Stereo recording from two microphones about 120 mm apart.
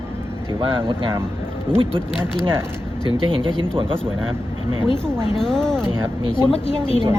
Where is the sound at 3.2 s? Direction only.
45° right (ahead or behind).